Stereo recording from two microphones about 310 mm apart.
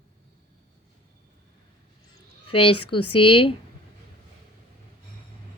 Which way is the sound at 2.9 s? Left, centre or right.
Left.